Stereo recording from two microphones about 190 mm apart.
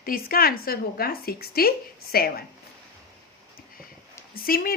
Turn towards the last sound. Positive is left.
turn(degrees=50)  # may be behind; listen again after turning